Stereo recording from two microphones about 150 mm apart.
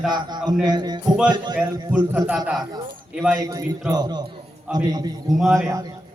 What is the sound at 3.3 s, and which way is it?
A man's voice, 25° right (ahead or behind).